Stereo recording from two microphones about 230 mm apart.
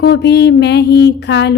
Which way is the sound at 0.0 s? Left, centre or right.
Left.